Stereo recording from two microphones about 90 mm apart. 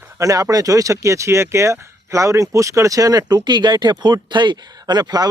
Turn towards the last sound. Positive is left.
turn(degrees=-45)  # may be behind; listen again after turning